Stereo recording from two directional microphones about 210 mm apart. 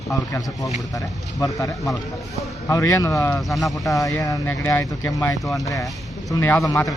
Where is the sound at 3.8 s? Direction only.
15° left (ahead or behind).